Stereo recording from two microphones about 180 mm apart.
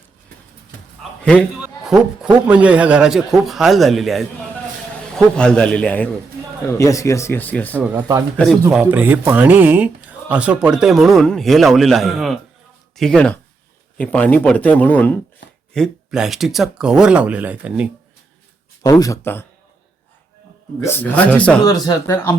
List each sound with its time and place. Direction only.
1.2 s speech: 5° left (ahead or behind)
7.8 s speech: 10° right (ahead or behind)
18.8 s speech: 20° left (ahead or behind)
20.8 s speech: 10° left (ahead or behind)
21.6 s speech: 20° left (ahead or behind)